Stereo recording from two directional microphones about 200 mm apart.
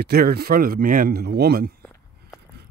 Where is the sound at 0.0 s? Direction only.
50° right (ahead or behind).